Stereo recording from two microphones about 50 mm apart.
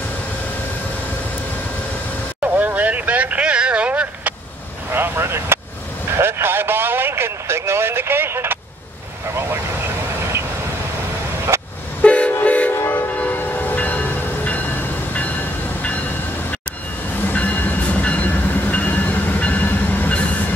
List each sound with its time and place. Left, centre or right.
2.4 s vehicle: right
4.9 s vehicle: right
6.1 s radio: right
9.3 s vehicle: right
11.5 s vehicle: right
12.0 s train: left
12.8 s train: left
13.2 s train: left
17.3 s train: left